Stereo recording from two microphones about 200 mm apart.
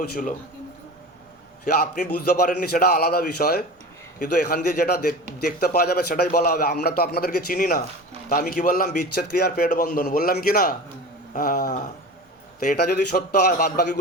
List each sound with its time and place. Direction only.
0.0 s a man's voice: 50° left (ahead or behind)
2.1 s a man's voice: 50° left (ahead or behind)